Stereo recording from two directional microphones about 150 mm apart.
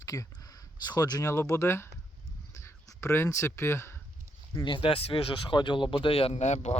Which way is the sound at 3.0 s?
20° left (ahead or behind).